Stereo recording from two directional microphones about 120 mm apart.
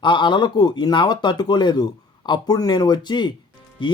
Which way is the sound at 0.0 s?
40° left (ahead or behind).